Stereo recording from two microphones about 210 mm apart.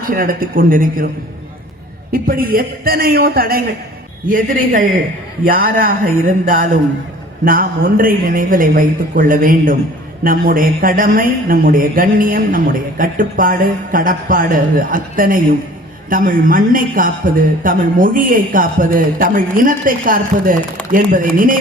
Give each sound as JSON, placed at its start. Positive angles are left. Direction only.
{"t": 0.1, "sound": "a woman's voice", "side_deg": -40}
{"t": 2.1, "sound": "a woman's voice", "side_deg": -45}